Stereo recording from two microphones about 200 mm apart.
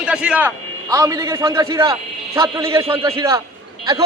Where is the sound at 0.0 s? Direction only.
5° right (ahead or behind).